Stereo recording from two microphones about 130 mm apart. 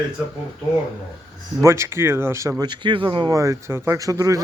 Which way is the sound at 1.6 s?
20° right (ahead or behind).